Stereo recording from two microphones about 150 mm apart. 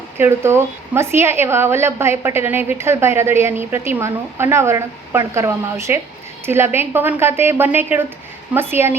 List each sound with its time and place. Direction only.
0.2 s a woman's voice: 15° right (ahead or behind)